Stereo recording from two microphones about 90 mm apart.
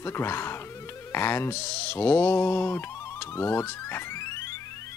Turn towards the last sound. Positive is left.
turn(degrees=30)  # may be behind; listen again after turning